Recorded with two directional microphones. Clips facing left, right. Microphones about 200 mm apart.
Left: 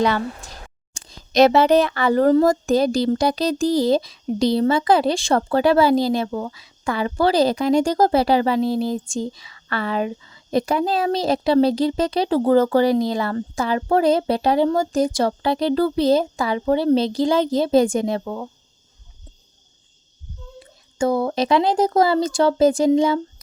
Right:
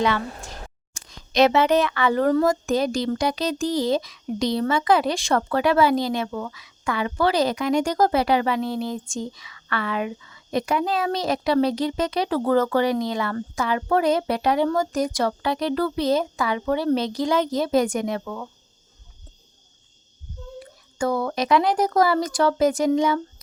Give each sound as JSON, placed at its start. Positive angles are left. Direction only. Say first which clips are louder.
{"t": 0.9, "sound": "speech", "louder": "left 4 dB", "side_deg": 30}
{"t": 20.6, "sound": "speech", "louder": "left 4 dB", "side_deg": 25}